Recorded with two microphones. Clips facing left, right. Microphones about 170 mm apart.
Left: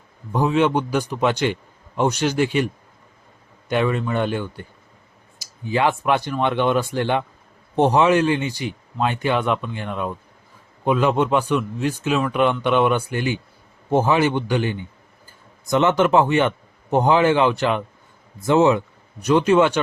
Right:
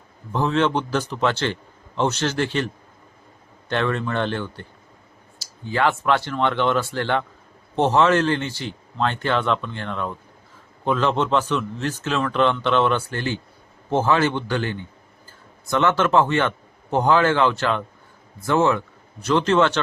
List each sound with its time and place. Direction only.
0.3 s a man's voice: 15° left (ahead or behind)
3.7 s a man's voice: 10° left (ahead or behind)